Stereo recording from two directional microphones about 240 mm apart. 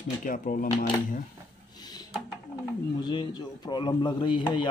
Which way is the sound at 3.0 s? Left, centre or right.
Centre.